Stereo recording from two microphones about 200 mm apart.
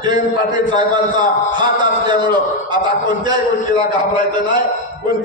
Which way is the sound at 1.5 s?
20° right (ahead or behind).